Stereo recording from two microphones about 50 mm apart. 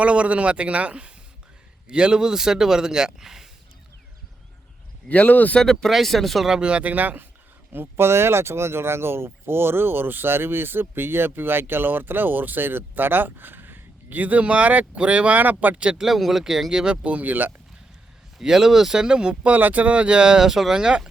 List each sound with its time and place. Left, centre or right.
0.0 s speech: right; by 3.5 s centre
5.0 s speech: left
5.5 s speech: centre
6.5 s speech: centre
7.7 s speech: right
15.4 s speech: right
16.0 s speech: centre
16.9 s speech: right
18.3 s speech: centre
19.5 s speech: right; by 21.0 s centre